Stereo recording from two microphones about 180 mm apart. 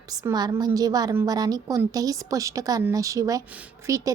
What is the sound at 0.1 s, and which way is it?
A woman's voice, 20° right (ahead or behind).